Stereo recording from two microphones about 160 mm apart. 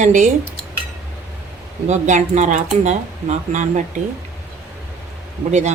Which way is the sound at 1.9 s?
45° right (ahead or behind).